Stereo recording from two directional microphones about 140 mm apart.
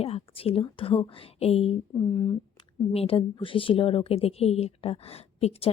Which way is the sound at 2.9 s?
45° left (ahead or behind).